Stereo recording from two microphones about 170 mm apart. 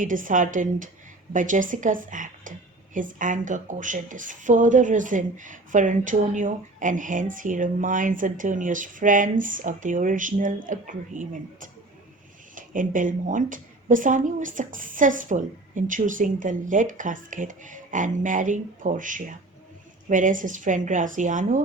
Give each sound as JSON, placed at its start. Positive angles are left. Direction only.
{"t": 0.0, "sound": "a woman's voice", "side_deg": -50}